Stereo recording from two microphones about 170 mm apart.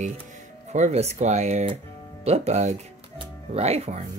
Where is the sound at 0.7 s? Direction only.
40° right (ahead or behind).